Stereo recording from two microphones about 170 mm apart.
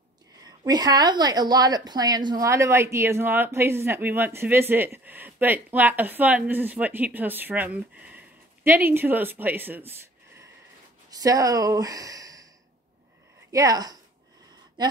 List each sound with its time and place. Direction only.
0.5 s a woman's voice: 25° right (ahead or behind)
11.1 s speech: 20° right (ahead or behind)
13.5 s a woman's voice: 20° right (ahead or behind)